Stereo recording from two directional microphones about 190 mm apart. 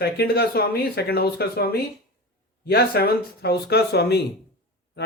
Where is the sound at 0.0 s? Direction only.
55° left (ahead or behind).